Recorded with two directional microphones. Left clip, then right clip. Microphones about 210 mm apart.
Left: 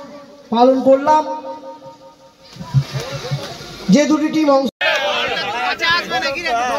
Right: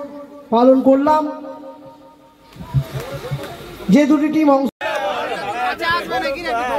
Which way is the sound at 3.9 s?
35° left (ahead or behind).